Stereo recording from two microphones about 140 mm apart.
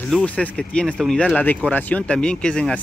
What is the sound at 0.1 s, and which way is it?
Speech, 10° left (ahead or behind).